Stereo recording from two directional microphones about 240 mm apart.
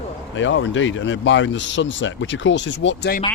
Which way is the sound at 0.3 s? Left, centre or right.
Left.